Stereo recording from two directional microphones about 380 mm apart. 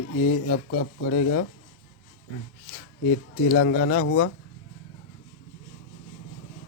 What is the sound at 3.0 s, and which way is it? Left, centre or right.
Speech, left.